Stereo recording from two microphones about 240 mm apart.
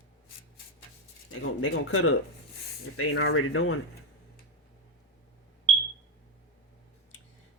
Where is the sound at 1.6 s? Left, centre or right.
Left.